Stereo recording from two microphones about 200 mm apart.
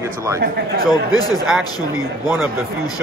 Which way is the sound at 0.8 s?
20° left (ahead or behind).